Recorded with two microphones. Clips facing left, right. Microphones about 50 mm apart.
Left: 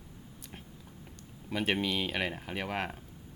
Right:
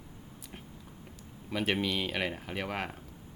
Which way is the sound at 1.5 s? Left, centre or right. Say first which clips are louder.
Even; centre.